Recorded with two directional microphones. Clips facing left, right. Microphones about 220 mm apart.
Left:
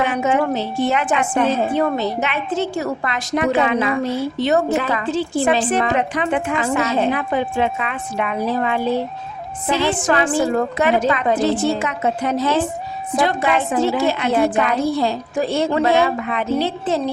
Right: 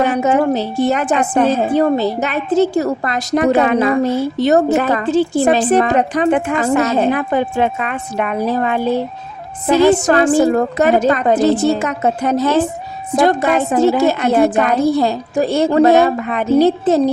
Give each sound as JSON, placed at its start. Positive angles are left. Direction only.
{"t": 0.0, "sound": "a woman's voice", "side_deg": -40}